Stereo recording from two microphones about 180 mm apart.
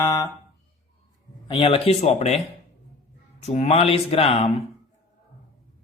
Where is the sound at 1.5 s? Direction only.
30° left (ahead or behind).